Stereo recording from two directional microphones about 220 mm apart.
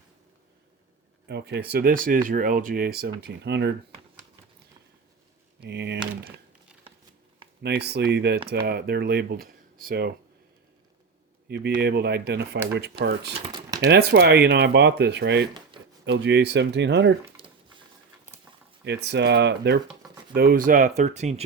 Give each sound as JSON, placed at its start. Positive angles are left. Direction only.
{"t": 1.3, "sound": "speech", "side_deg": -50}
{"t": 5.5, "sound": "speech", "side_deg": -50}
{"t": 7.6, "sound": "speech", "side_deg": -45}
{"t": 11.4, "sound": "speech", "side_deg": -50}
{"t": 13.4, "sound": "speech", "side_deg": -20}
{"t": 13.8, "sound": "speech", "side_deg": -45}
{"t": 18.9, "sound": "speech", "side_deg": -50}